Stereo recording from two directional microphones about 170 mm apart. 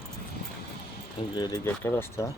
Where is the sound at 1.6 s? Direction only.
15° left (ahead or behind).